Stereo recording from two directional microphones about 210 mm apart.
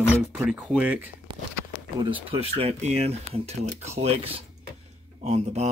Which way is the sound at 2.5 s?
30° right (ahead or behind).